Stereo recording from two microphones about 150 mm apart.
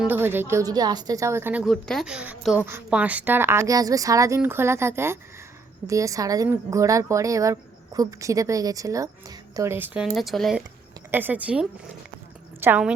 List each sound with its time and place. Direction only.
0.0 s a woman's voice: 15° right (ahead or behind)
1.6 s a woman's voice: centre (ahead or behind)
11.1 s a woman's voice: 10° right (ahead or behind)